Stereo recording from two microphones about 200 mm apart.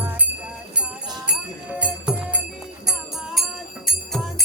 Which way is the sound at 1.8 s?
5° right (ahead or behind).